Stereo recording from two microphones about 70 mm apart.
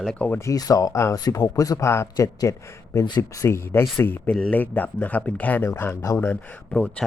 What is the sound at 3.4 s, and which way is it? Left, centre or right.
Speech, left.